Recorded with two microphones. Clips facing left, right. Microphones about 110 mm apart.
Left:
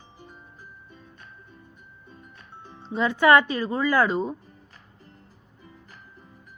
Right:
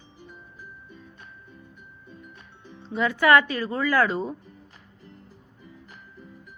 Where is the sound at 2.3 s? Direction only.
40° left (ahead or behind).